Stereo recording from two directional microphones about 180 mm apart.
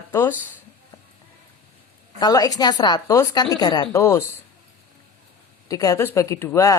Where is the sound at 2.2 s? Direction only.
20° left (ahead or behind).